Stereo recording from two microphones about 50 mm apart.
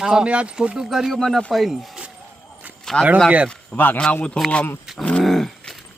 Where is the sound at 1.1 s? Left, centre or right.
Centre.